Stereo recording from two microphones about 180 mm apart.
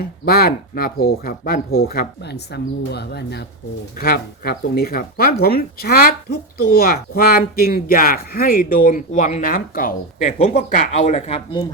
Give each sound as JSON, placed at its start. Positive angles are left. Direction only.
{"t": 0.0, "sound": "speech", "side_deg": 60}